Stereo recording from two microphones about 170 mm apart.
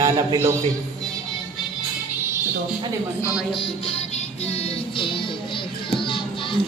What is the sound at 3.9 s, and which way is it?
Music, 35° left (ahead or behind).